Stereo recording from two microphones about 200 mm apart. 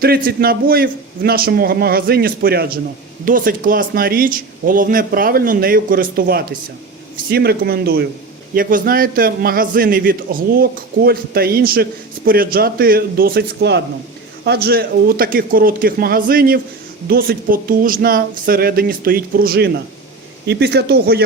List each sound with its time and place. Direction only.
0.3 s a man's voice: 50° right (ahead or behind)